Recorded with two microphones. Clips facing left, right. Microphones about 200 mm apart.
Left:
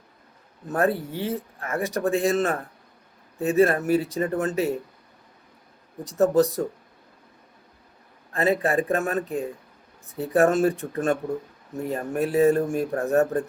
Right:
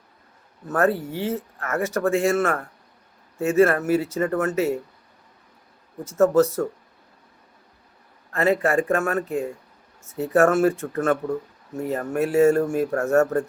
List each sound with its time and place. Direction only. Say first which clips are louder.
0.7 s speech: right 2 dB; 15° left (ahead or behind)
6.1 s speech: right 2 dB; 15° left (ahead or behind)
8.3 s speech: right 2 dB; 15° left (ahead or behind)
12.2 s speech: right 2 dB; 15° left (ahead or behind)